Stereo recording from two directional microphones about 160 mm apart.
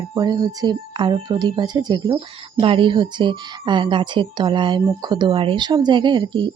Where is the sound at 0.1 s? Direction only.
25° right (ahead or behind).